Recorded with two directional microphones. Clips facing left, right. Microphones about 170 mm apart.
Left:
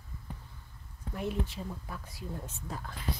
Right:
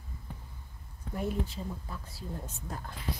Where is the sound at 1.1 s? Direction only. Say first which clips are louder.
Right 1 dB; centre (ahead or behind).